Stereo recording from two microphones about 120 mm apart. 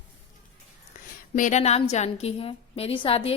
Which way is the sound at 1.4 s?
80° left.